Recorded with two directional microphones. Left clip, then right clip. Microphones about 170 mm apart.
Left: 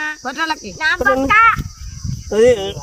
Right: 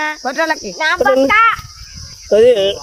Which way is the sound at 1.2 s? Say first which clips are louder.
Left 4 dB; 65° right (ahead or behind).